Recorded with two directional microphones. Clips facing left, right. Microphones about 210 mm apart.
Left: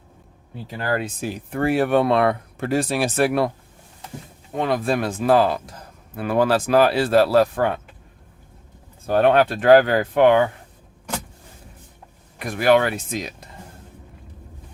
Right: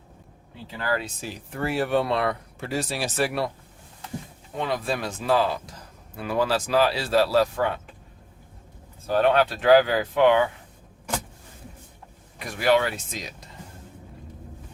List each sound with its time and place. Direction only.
0.8 s speech: 50° left (ahead or behind)
4.5 s speech: 55° left (ahead or behind)
9.0 s speech: 55° left (ahead or behind)
12.4 s speech: 55° left (ahead or behind)